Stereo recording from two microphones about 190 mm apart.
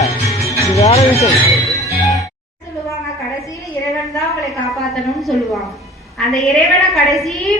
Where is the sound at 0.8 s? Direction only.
30° left (ahead or behind).